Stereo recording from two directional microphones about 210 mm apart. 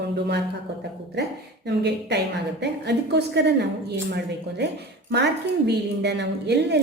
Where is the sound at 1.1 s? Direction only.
55° right (ahead or behind).